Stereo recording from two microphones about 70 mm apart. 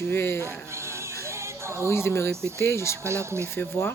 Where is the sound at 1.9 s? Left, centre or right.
Left.